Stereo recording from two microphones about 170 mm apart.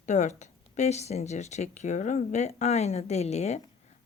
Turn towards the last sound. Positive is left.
turn(degrees=40)  # may be behind; listen again after turning